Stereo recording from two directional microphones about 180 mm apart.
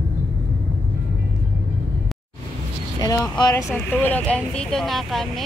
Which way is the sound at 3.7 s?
10° left (ahead or behind).